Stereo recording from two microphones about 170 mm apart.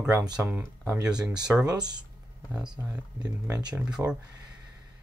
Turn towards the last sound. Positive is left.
turn(degrees=-5)  # may be behind; listen again after turning